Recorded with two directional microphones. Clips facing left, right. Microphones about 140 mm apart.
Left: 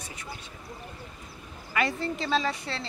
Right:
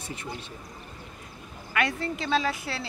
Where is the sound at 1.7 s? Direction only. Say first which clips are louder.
Even; centre (ahead or behind).